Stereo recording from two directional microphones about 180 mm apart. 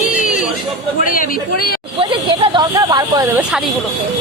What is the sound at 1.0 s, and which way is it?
Speech, 50° left (ahead or behind).